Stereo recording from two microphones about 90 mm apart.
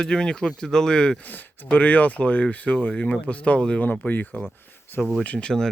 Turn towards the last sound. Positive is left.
turn(degrees=10)  # may be behind; listen again after turning